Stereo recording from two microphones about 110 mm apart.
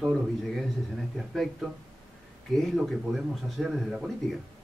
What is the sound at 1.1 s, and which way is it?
Speech, centre (ahead or behind).